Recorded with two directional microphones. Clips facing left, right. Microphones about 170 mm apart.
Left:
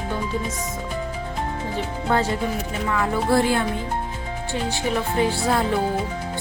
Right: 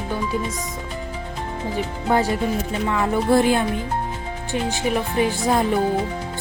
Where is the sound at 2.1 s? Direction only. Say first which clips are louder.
Right 2 dB; 10° right (ahead or behind).